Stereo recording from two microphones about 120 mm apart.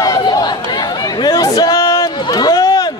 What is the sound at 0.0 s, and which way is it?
Chatter, 35° left (ahead or behind).